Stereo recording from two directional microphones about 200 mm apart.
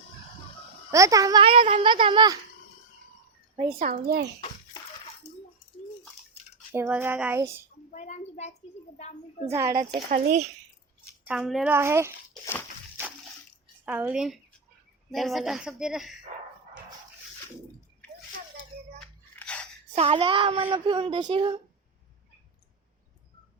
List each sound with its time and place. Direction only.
0.9 s speech: 15° right (ahead or behind)
3.8 s a child's voice: 45° right (ahead or behind)
6.7 s child singing: 10° right (ahead or behind)
7.9 s a sound: 35° left (ahead or behind)
9.5 s child singing: 15° right (ahead or behind)
10.1 s a child's voice: 40° right (ahead or behind)
11.3 s speech: centre (ahead or behind)
11.7 s child singing: 15° right (ahead or behind)
13.8 s speech: 5° right (ahead or behind)
19.4 s gasp: 5° left (ahead or behind)
20.0 s speech: 25° right (ahead or behind)